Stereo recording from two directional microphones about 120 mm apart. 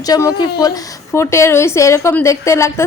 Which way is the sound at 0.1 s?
30° left (ahead or behind).